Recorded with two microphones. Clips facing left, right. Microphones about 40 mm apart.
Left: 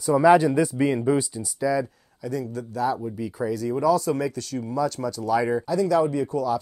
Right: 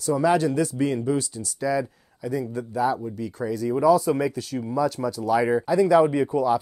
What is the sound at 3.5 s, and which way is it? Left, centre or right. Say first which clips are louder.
Speech: right 3 dB; centre.